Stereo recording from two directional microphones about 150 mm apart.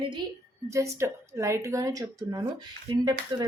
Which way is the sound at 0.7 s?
20° right (ahead or behind).